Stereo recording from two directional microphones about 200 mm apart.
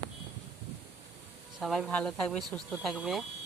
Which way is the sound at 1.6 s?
Centre (ahead or behind).